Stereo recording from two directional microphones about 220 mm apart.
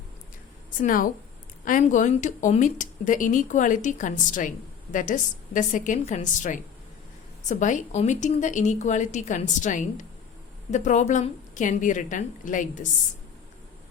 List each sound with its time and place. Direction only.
0.8 s speech: 40° left (ahead or behind)